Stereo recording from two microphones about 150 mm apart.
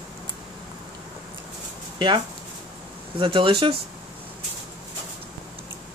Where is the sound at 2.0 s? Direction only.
30° right (ahead or behind).